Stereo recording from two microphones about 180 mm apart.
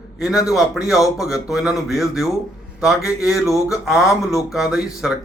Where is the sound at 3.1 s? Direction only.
15° left (ahead or behind).